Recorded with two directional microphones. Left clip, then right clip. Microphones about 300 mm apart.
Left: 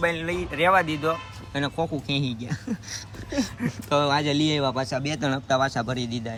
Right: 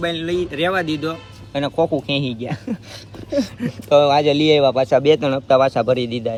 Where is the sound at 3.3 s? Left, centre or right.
Centre.